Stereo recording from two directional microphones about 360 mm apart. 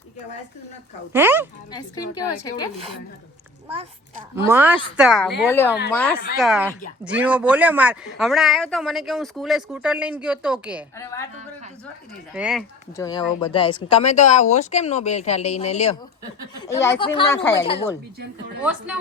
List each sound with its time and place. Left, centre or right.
1.1 s speech: centre
1.7 s speech: centre
4.4 s speech: centre
10.9 s speech: centre
12.3 s speech: centre
13.1 s speech: centre
18.6 s speech: centre